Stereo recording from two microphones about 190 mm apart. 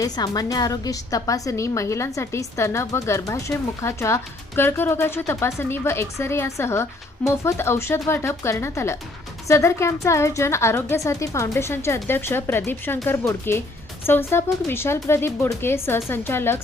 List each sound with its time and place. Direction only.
0.0 s a woman's voice: 20° left (ahead or behind)